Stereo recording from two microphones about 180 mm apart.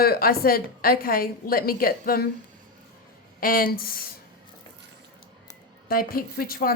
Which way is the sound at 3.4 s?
55° left (ahead or behind).